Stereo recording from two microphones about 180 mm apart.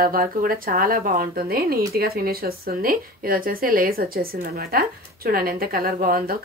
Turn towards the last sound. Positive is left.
turn(degrees=-55)  # may be behind; listen again after turning